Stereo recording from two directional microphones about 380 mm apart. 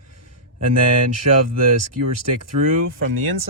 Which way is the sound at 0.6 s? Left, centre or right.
Right.